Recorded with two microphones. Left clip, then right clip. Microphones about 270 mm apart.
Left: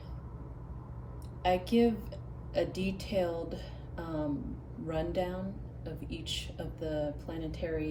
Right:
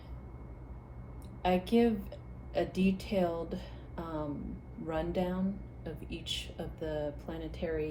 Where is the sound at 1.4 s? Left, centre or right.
Centre.